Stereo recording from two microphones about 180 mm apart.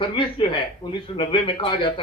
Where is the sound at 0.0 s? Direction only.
25° left (ahead or behind).